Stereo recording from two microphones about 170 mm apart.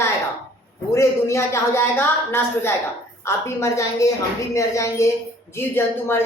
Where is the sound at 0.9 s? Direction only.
15° left (ahead or behind).